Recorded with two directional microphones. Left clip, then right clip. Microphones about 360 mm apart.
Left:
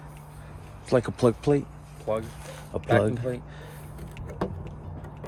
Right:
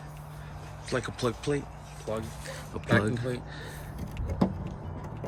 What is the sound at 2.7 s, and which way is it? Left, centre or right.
Speech, centre.